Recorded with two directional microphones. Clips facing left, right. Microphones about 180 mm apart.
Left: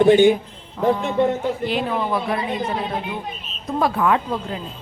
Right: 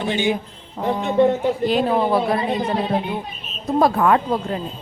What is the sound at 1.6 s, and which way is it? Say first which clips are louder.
Speech: right 4 dB; 40° right (ahead or behind).